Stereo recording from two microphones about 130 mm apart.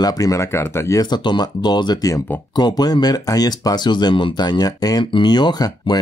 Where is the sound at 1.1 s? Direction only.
35° left (ahead or behind).